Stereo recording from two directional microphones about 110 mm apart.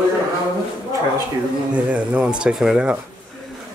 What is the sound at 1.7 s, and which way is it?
Speech, 10° right (ahead or behind).